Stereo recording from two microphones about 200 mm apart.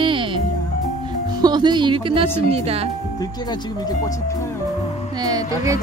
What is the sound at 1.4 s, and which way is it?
Speech, 20° right (ahead or behind).